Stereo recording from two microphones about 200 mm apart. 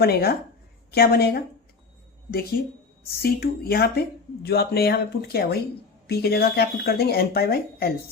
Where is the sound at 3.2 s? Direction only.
50° left (ahead or behind).